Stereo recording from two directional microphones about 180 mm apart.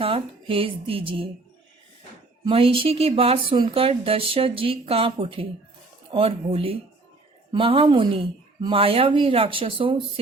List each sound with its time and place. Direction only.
0.0 s speech: 30° right (ahead or behind)
2.4 s a woman's voice: 30° right (ahead or behind)